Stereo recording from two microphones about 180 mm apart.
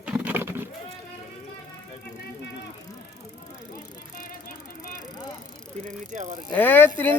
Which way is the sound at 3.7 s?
50° left (ahead or behind).